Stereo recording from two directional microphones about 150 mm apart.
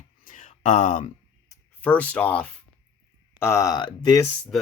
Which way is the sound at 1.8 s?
10° left (ahead or behind).